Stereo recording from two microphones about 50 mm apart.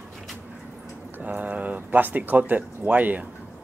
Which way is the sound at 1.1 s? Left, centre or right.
Right.